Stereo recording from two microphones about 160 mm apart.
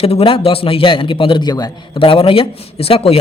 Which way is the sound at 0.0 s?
40° left (ahead or behind).